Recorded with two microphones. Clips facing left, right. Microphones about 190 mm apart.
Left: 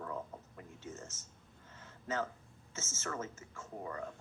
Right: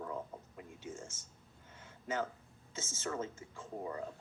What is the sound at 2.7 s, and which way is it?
Speech, 15° right (ahead or behind).